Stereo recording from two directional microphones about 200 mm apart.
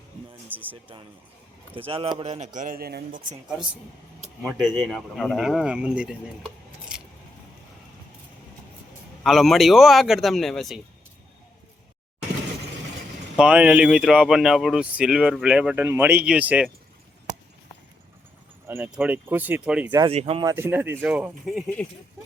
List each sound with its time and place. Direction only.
0.4 s speech: 10° right (ahead or behind)
1.7 s speech: 25° right (ahead or behind)
2.6 s speech: 45° right (ahead or behind)
4.4 s speech: centre (ahead or behind)
9.2 s speech: centre (ahead or behind)
13.3 s speech: 5° right (ahead or behind)
18.7 s speech: 5° right (ahead or behind)
19.9 s speech: 20° right (ahead or behind)
20.5 s speech: 10° right (ahead or behind)